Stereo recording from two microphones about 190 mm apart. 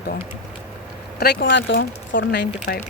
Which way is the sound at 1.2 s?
50° left (ahead or behind).